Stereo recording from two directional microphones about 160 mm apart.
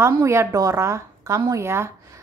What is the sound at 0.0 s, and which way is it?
A woman's voice, 15° right (ahead or behind).